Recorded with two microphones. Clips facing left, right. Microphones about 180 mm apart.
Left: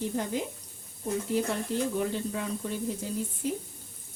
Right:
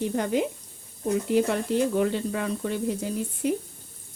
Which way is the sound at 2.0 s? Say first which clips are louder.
Right 5 dB; 80° right.